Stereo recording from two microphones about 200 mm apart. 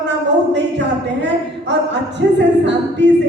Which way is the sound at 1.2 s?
60° right (ahead or behind).